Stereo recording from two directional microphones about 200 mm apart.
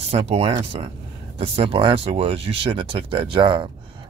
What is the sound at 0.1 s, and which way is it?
Speech, 30° right (ahead or behind).